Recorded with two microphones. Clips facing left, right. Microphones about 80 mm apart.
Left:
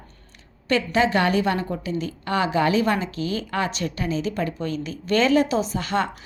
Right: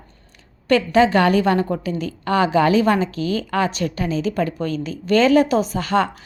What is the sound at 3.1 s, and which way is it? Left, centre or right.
Speech, left.